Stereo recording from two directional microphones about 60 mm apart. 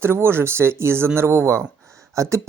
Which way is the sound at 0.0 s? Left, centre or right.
Right.